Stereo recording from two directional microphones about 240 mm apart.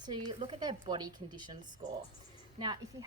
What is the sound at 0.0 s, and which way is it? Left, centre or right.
Speech, centre.